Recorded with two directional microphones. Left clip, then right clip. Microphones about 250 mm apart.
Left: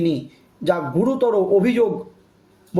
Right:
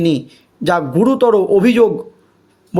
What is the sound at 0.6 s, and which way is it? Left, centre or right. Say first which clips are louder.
Speech: right 5 dB; right.